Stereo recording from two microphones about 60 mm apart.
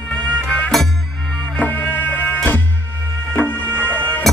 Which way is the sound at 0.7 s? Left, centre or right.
Centre.